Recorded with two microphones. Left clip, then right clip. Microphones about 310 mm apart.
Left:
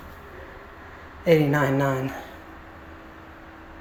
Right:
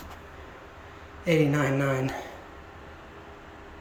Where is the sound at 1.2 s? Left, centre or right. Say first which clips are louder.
Left 5 dB; centre.